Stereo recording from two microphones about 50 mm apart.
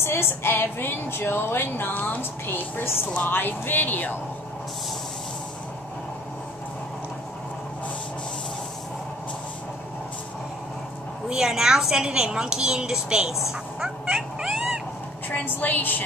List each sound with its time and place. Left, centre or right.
0.0 s a woman's voice: left
11.2 s a woman's voice: centre
14.5 s cat: centre
15.2 s a woman's voice: left